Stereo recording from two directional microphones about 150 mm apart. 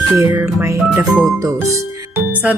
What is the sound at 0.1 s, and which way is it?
Speech, 15° right (ahead or behind).